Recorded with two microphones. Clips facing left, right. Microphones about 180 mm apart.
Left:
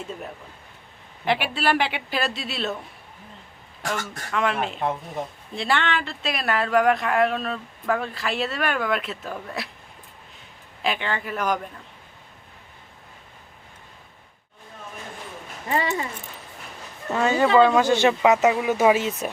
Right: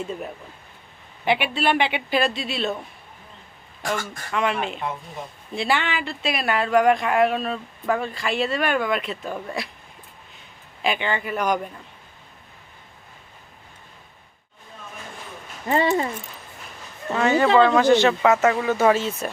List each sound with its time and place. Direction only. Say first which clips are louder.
1.2 s speech: right 2 dB; centre (ahead or behind)
3.8 s speech: right 2 dB; centre (ahead or behind)
10.8 s speech: right 2 dB; centre (ahead or behind)
15.7 s speech: right 5 dB; 30° right (ahead or behind)
17.3 s speech: even; 10° left (ahead or behind)